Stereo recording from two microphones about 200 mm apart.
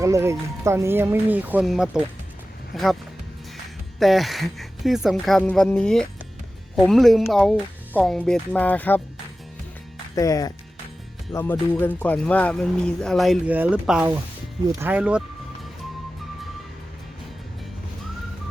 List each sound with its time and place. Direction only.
0.0 s speech: 15° right (ahead or behind)
4.0 s speech: centre (ahead or behind)
10.2 s speech: 15° left (ahead or behind); by 15.2 s 5° right (ahead or behind)